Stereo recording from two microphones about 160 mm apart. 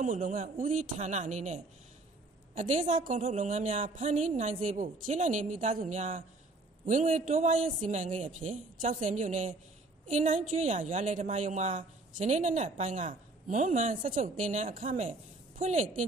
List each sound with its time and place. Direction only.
0.0 s a woman's voice: 55° right (ahead or behind)